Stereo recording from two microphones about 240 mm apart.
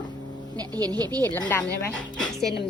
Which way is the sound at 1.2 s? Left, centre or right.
Centre.